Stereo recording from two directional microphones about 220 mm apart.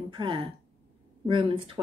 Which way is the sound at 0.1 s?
20° right (ahead or behind).